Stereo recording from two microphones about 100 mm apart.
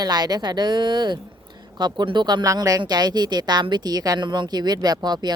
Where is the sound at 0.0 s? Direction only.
45° right (ahead or behind).